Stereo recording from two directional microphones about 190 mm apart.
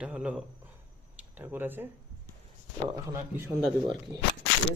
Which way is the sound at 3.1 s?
10° right (ahead or behind).